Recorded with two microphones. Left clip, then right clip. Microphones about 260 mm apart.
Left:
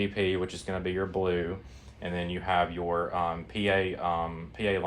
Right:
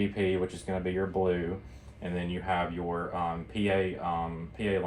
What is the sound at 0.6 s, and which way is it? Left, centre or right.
Speech, centre.